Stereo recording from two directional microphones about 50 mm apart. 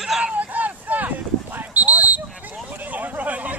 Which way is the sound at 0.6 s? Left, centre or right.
Right.